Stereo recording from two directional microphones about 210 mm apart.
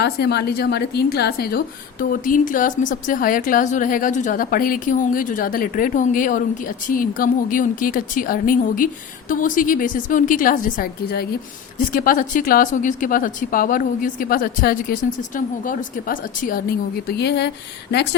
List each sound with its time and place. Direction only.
0.0 s a woman's voice: 50° left (ahead or behind)